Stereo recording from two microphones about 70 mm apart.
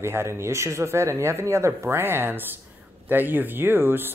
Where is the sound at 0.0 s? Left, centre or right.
Right.